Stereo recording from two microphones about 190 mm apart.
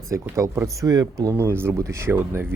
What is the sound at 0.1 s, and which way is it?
Speech, 15° right (ahead or behind).